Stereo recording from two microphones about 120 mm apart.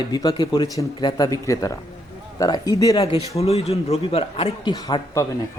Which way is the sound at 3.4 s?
60° left (ahead or behind).